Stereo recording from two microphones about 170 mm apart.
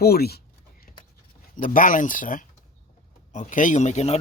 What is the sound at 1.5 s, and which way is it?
Speech, 55° left (ahead or behind).